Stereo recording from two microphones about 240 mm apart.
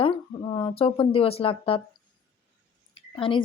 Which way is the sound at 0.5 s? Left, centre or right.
Left.